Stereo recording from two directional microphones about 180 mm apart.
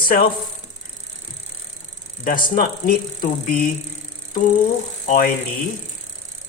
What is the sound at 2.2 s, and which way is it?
Speech, 50° left (ahead or behind).